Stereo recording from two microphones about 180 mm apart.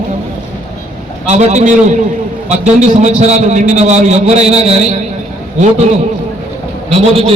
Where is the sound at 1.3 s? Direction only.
40° right (ahead or behind).